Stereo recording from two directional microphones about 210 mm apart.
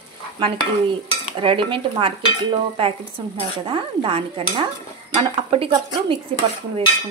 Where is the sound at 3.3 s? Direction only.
25° right (ahead or behind).